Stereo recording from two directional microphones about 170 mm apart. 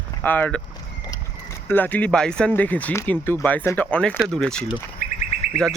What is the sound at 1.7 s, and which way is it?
Speech, 10° left (ahead or behind).